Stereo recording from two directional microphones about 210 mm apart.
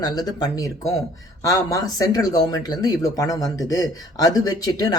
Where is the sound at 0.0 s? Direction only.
20° left (ahead or behind).